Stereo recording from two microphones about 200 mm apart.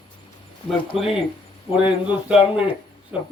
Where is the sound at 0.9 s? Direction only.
Centre (ahead or behind).